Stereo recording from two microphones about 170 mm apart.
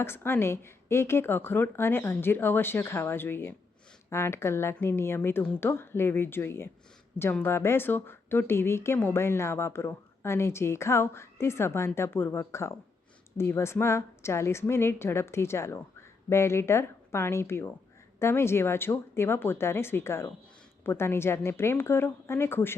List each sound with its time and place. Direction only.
0.0 s speech: 15° left (ahead or behind)